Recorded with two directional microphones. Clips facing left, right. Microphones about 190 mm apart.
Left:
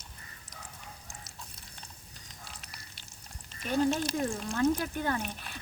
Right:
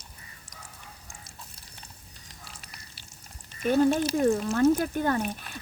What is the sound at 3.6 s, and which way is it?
Speech, 50° right (ahead or behind).